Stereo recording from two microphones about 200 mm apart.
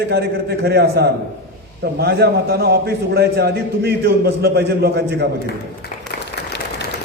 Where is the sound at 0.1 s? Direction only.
50° right (ahead or behind).